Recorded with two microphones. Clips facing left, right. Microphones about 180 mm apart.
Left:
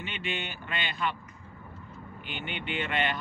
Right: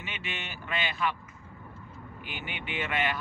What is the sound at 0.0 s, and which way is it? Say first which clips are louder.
Speech: left 4 dB; 5° right (ahead or behind).